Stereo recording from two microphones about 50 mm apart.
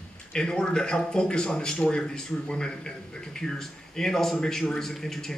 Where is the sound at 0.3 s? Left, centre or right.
Centre.